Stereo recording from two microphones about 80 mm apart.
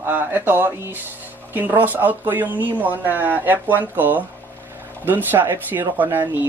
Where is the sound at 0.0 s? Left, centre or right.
Right.